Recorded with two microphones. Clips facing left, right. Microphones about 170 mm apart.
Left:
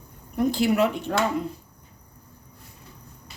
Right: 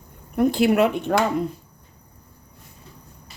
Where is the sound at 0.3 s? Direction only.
60° right (ahead or behind).